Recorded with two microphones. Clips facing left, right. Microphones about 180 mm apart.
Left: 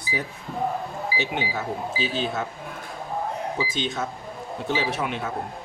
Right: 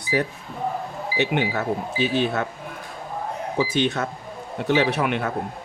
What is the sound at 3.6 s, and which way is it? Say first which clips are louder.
Speech: right 9 dB; 65° right (ahead or behind).